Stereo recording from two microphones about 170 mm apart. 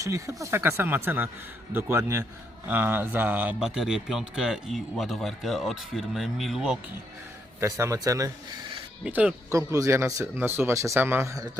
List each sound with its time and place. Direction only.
0.0 s speech: 20° right (ahead or behind); by 6.7 s centre (ahead or behind)
7.6 s a man's voice: 15° right (ahead or behind)
9.0 s speech: 10° right (ahead or behind)
9.5 s speech: 20° right (ahead or behind)